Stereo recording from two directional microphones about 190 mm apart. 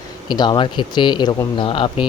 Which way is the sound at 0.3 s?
25° left (ahead or behind).